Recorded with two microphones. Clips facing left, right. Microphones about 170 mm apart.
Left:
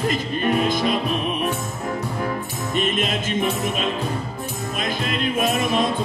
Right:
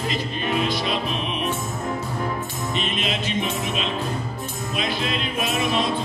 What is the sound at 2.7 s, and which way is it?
Music, 50° left (ahead or behind).